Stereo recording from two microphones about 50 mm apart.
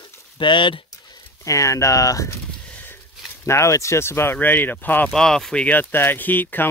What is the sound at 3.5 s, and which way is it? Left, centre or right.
Speech, left.